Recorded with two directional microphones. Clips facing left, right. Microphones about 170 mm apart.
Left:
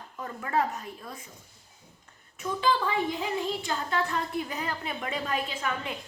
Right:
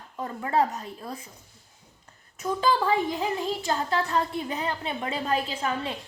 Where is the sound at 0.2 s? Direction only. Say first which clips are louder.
Right 4 dB; 30° right (ahead or behind).